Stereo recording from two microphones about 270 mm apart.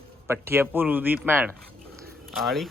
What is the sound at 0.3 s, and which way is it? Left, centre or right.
Speech, centre.